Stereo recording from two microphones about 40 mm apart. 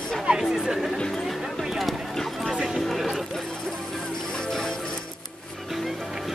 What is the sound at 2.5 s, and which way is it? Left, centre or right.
Music, centre.